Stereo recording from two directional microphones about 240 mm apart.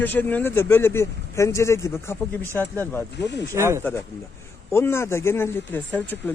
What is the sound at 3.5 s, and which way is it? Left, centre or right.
Speech, centre.